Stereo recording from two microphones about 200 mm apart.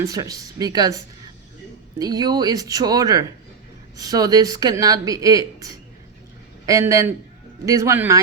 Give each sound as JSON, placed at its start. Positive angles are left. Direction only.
{"t": 0.0, "sound": "speech", "side_deg": -15}
{"t": 6.7, "sound": "speech", "side_deg": -15}